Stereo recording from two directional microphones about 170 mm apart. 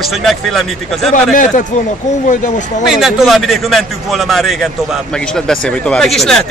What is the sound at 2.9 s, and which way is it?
A man's voice, 5° right (ahead or behind).